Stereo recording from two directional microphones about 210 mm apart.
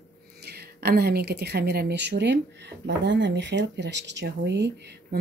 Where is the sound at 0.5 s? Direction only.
50° right (ahead or behind).